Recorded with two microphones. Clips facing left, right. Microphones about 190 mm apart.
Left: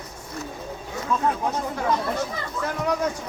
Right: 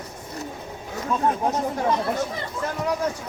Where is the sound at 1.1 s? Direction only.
30° right (ahead or behind).